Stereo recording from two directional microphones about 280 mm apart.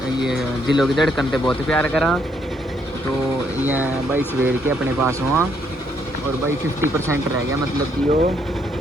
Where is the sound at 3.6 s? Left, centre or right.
Centre.